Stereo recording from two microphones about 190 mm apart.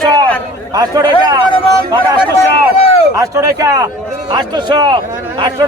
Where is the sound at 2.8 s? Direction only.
30° left (ahead or behind).